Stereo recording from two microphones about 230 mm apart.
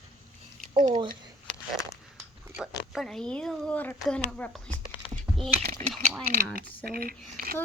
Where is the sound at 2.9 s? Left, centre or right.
Centre.